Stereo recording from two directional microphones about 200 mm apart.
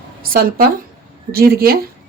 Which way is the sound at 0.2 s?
45° right (ahead or behind).